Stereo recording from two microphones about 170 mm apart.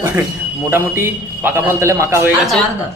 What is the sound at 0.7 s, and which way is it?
A man's voice, 15° right (ahead or behind).